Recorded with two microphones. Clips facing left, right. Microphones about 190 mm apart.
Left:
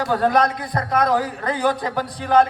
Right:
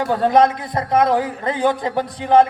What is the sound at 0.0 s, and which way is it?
A man's voice, 20° right (ahead or behind).